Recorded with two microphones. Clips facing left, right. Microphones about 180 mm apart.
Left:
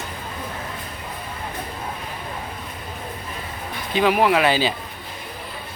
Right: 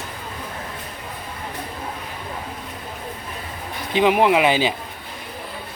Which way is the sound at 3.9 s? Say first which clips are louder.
Right 2 dB; 20° right (ahead or behind).